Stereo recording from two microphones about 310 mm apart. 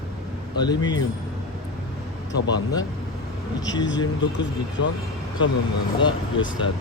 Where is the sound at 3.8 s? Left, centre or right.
Left.